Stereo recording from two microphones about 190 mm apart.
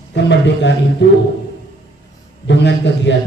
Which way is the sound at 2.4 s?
65° left (ahead or behind).